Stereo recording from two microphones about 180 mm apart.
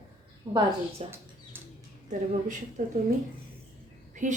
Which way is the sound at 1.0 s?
35° right (ahead or behind).